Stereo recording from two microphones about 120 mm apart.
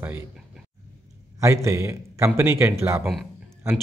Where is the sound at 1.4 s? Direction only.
25° right (ahead or behind).